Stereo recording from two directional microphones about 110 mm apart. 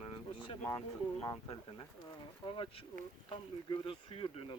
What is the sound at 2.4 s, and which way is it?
Speech, 50° left (ahead or behind).